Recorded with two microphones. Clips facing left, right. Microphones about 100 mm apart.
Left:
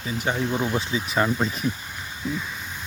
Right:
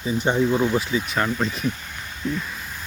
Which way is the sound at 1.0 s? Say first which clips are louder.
Left 1 dB; 5° left (ahead or behind).